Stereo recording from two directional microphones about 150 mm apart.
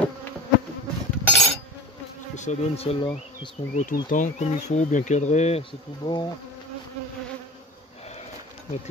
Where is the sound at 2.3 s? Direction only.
50° left (ahead or behind); by 3.5 s 35° left (ahead or behind).